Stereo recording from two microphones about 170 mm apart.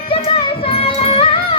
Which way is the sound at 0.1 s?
35° left (ahead or behind).